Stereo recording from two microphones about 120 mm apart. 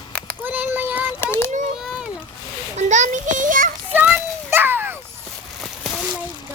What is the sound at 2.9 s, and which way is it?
Speech, 90° right.